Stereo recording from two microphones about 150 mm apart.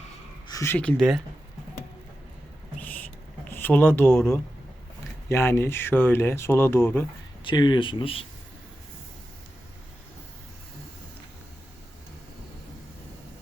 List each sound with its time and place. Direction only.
0.4 s speech: 20° left (ahead or behind)
3.5 s a sound: 15° left (ahead or behind)
3.9 s speech: 10° left (ahead or behind)
5.3 s speech: 15° left (ahead or behind)
7.4 s speech: 30° left (ahead or behind)